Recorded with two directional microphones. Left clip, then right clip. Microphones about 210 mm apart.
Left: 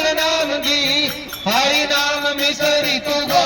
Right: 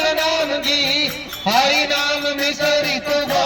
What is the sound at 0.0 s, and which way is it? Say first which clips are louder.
Music: left 1 dB; 10° left (ahead or behind).